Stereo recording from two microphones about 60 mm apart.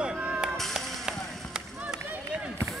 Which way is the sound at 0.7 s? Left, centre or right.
Centre.